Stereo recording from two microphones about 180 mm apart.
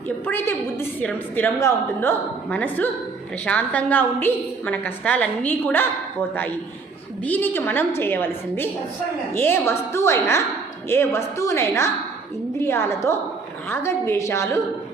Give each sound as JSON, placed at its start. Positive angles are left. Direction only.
{"t": 0.3, "sound": "a woman's voice", "side_deg": 15}
{"t": 7.3, "sound": "a woman's voice", "side_deg": 10}